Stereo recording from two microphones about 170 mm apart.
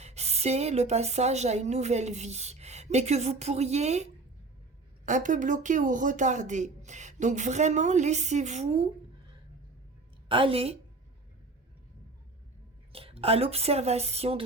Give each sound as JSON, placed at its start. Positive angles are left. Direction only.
{"t": 0.0, "sound": "a woman's voice", "side_deg": -40}
{"t": 10.2, "sound": "a woman's voice", "side_deg": -30}
{"t": 12.9, "sound": "speech", "side_deg": -35}